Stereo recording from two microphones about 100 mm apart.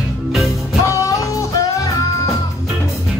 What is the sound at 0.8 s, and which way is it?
Music, 30° left (ahead or behind).